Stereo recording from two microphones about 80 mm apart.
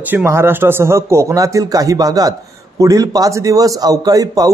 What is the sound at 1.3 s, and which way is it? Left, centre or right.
A man's voice, right.